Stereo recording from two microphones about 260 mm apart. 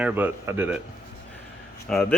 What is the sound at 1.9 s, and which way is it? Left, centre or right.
Speech, centre.